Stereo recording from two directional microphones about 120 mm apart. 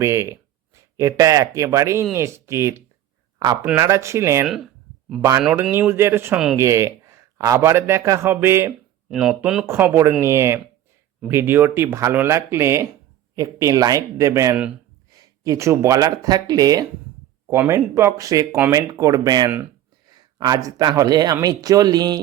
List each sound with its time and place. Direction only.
0.0 s a man's voice: 25° right (ahead or behind)
4.4 s a sound: 5° right (ahead or behind)
5.8 s a man's voice: 20° right (ahead or behind)
9.0 s speech: 5° right (ahead or behind)
9.6 s a man's voice: 20° right (ahead or behind); by 22.2 s 35° right (ahead or behind)